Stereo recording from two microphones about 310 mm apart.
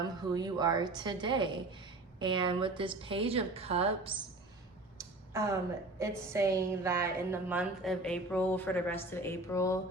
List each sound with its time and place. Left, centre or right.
0.2 s a woman's voice: centre
4.9 s a sound: centre
6.0 s a woman's voice: centre
9.1 s music: centre